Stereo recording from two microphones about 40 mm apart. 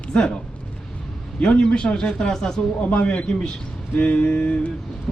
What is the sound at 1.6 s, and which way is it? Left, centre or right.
Speech, left.